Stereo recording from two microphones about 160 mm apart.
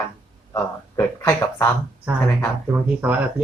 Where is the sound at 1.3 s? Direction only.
20° left (ahead or behind).